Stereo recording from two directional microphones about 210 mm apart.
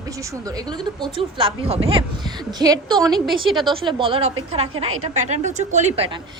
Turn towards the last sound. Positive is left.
turn(degrees=-30)  # may be behind; listen again after turning